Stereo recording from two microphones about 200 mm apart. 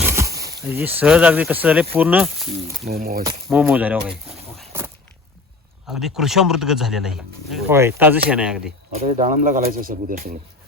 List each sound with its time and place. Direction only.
0.0 s a sound: 15° right (ahead or behind)
0.3 s a sound: 50° right (ahead or behind)
0.7 s speech: 10° right (ahead or behind)
2.8 s speech: 50° right (ahead or behind)
3.5 s speech: 5° right (ahead or behind)
4.3 s a sound: centre (ahead or behind)
5.9 s speech: centre (ahead or behind)
7.7 s speech: 10° right (ahead or behind)
9.0 s speech: 35° right (ahead or behind)